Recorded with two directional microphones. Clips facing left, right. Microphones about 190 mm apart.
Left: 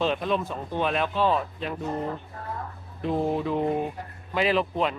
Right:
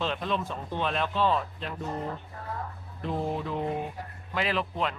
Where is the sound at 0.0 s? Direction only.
10° left (ahead or behind).